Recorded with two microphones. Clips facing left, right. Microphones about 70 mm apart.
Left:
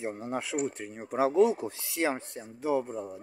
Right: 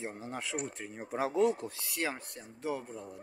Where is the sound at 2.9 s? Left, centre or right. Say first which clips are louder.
Left 7 dB; left.